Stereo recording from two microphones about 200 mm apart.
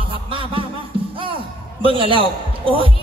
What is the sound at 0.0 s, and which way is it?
Music, 25° right (ahead or behind).